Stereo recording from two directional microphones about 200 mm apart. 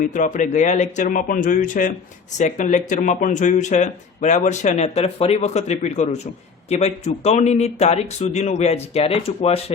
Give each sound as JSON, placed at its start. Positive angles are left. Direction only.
{"t": 0.0, "sound": "speech", "side_deg": 40}